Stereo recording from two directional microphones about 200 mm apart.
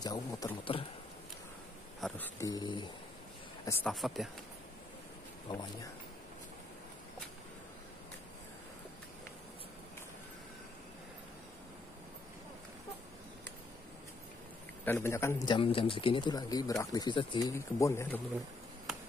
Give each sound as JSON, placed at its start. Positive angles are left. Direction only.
{"t": 0.0, "sound": "a man's voice", "side_deg": 20}
{"t": 2.0, "sound": "speech", "side_deg": 5}
{"t": 3.8, "sound": "speech", "side_deg": 0}
{"t": 5.5, "sound": "a man's voice", "side_deg": 20}
{"t": 14.9, "sound": "a man's voice", "side_deg": 15}